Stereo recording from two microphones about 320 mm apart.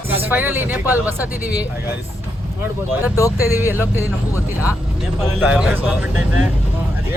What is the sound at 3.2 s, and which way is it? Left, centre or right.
Speech, centre.